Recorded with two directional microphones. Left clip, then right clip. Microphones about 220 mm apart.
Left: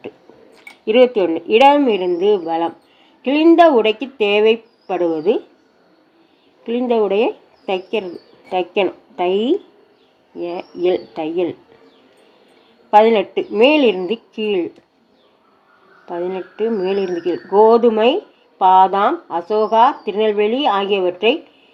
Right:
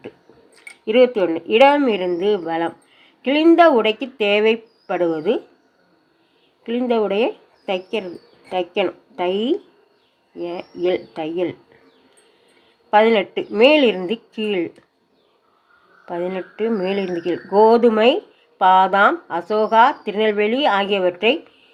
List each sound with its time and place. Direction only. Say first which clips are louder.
0.9 s speech: left 2 dB; 15° right (ahead or behind)
6.7 s speech: left 3 dB; 20° right (ahead or behind)
12.9 s speech: left 3 dB; 20° right (ahead or behind)
16.0 s speech: left 1 dB; 25° right (ahead or behind)